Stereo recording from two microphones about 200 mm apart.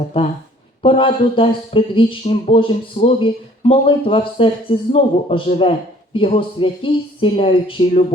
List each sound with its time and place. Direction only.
0.1 s speech: 25° left (ahead or behind)